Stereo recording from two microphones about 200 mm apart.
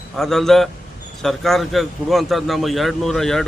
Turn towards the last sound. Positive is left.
turn(degrees=0)  # may be behind; listen again after turning